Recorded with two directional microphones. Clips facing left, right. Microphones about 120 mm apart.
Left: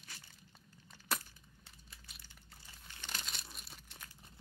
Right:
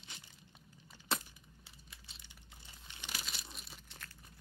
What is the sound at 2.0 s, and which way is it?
Crumpling, 20° right (ahead or behind).